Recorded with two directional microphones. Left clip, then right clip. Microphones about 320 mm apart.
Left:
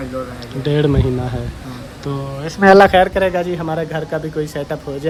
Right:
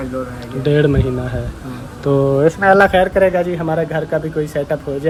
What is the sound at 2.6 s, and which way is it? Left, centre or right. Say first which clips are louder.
Speech: left 5 dB; left.